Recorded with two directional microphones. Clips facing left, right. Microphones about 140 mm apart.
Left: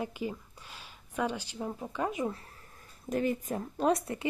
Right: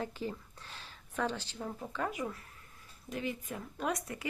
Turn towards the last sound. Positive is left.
turn(degrees=30)  # may be behind; listen again after turning